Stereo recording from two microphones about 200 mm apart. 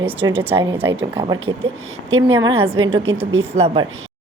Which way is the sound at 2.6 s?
30° right (ahead or behind).